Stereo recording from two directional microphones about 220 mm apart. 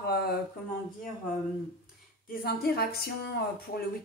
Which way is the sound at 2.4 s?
45° left (ahead or behind).